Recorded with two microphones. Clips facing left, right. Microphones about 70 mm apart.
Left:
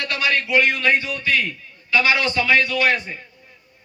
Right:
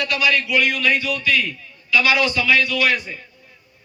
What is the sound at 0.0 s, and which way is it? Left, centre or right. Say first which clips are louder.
A man's voice: right 2 dB; left.